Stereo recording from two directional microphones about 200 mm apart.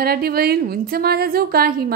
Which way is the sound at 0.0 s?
50° right (ahead or behind).